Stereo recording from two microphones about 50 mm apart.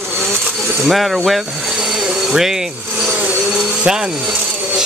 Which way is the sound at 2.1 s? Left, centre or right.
Centre.